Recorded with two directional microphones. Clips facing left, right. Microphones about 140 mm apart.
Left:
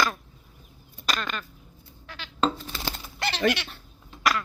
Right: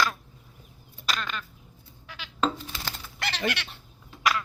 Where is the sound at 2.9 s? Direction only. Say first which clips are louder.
Left 4 dB; 25° left (ahead or behind).